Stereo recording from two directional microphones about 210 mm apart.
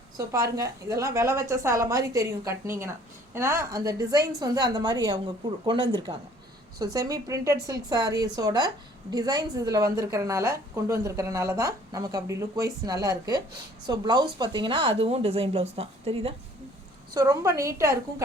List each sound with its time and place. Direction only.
0.2 s a woman's voice: 15° right (ahead or behind)
17.2 s speech: 15° right (ahead or behind)